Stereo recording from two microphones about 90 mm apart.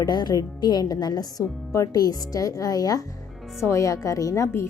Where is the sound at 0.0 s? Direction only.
55° left (ahead or behind).